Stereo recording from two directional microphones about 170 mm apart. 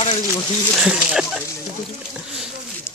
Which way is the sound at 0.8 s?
5° right (ahead or behind).